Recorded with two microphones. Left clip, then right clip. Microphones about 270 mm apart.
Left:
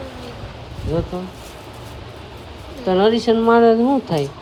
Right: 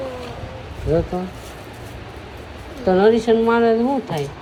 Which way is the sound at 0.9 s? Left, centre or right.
Centre.